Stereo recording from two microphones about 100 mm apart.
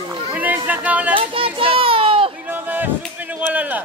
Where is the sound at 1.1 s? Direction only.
60° right (ahead or behind).